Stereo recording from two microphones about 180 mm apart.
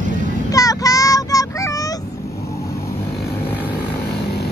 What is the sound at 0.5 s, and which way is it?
Child singing, 20° left (ahead or behind).